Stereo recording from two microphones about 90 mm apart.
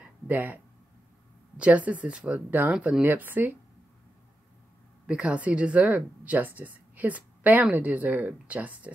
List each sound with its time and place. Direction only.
0.0 s a sound: 20° right (ahead or behind)
1.6 s a woman's voice: 15° right (ahead or behind)
5.0 s a woman's voice: 10° right (ahead or behind)